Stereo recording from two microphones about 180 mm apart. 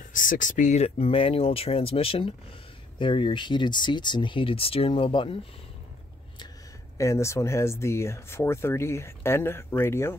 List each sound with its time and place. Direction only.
0.0 s speech: 50° left (ahead or behind); by 5.4 s 30° left (ahead or behind)
7.0 s speech: 15° left (ahead or behind)